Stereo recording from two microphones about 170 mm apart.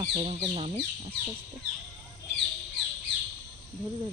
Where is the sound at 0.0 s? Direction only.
35° right (ahead or behind).